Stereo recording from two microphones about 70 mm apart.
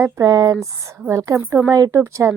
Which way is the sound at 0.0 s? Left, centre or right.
Right.